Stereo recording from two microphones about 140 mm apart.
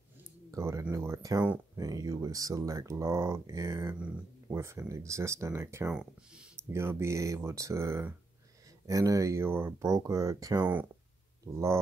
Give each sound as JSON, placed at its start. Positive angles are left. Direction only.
{"t": 0.5, "sound": "a sound", "side_deg": -20}
{"t": 1.8, "sound": "speech", "side_deg": -25}
{"t": 10.6, "sound": "speech", "side_deg": -10}